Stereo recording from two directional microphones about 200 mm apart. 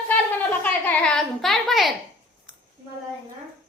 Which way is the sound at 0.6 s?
5° left (ahead or behind).